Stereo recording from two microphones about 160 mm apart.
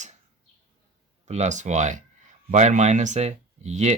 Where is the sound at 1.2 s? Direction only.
45° right (ahead or behind).